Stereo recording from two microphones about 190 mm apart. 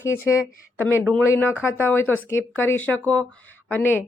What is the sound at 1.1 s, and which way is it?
Speech, 10° left (ahead or behind).